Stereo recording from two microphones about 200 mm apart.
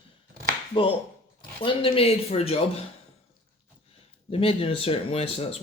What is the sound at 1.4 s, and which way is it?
Speech, 25° left (ahead or behind).